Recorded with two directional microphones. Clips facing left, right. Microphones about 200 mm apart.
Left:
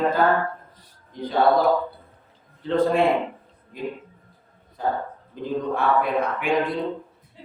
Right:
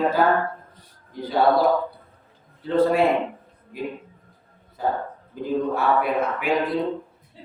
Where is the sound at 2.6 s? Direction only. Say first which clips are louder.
Right 1 dB; 5° right (ahead or behind).